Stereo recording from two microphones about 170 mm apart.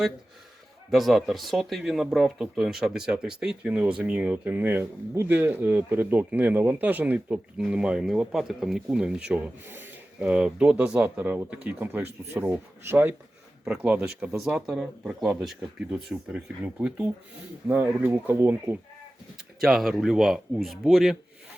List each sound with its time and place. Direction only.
0.9 s speech: centre (ahead or behind)
19.5 s speech: centre (ahead or behind)